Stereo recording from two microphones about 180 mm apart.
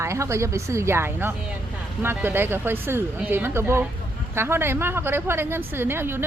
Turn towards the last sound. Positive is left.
turn(degrees=-10)  # may be behind; listen again after turning